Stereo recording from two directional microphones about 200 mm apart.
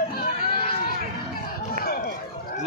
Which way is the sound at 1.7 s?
50° left (ahead or behind).